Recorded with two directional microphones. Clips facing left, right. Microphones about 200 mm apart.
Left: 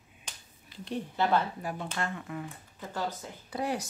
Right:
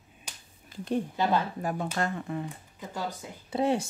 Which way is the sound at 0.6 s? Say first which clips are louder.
Right 6 dB; 45° right (ahead or behind).